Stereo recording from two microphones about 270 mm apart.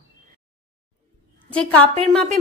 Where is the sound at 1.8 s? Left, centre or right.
Right.